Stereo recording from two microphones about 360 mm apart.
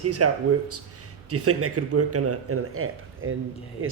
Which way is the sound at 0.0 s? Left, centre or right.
Right.